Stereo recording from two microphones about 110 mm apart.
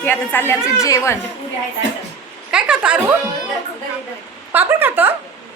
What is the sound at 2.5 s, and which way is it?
Speech, 10° right (ahead or behind).